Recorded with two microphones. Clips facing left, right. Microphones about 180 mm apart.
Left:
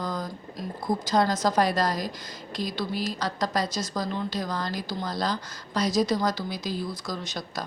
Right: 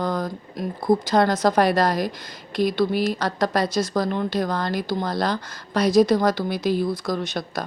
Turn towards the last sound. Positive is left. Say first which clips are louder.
# right 7 dB
turn(degrees=-60)  # may be behind; listen again after turning